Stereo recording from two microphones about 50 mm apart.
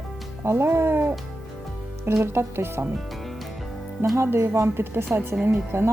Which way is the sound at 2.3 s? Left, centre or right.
Right.